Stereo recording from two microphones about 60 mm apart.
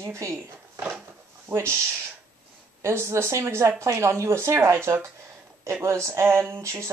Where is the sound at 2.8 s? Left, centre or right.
Right.